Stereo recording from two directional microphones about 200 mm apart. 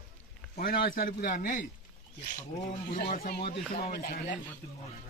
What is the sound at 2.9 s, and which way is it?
Speech, 45° left (ahead or behind).